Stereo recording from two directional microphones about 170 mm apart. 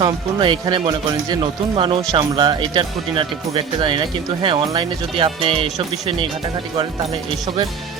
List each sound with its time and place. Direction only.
0.0 s speech: 30° right (ahead or behind)